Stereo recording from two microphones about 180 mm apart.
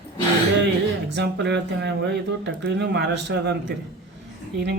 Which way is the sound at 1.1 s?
70° right (ahead or behind).